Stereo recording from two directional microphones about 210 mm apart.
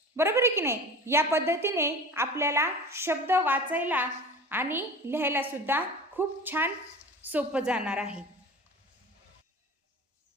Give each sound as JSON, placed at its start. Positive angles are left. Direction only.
{"t": 0.2, "sound": "a woman's voice", "side_deg": -15}